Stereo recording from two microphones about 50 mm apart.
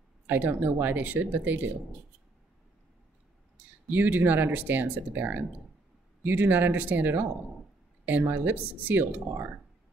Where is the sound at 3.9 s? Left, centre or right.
Right.